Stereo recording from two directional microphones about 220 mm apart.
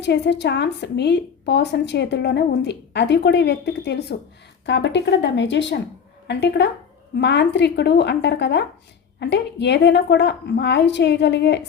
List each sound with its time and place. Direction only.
0.0 s a woman's voice: 50° left (ahead or behind)